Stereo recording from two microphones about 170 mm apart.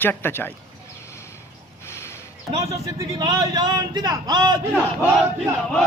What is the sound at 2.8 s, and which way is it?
Speech, 20° right (ahead or behind).